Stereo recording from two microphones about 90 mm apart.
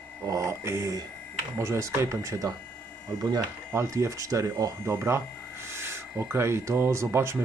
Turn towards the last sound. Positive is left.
turn(degrees=-30)  # may be behind; listen again after turning